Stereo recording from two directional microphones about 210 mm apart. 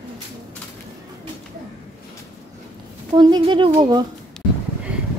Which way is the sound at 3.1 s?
20° right (ahead or behind).